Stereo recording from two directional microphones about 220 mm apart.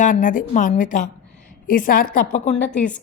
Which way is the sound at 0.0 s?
35° left (ahead or behind).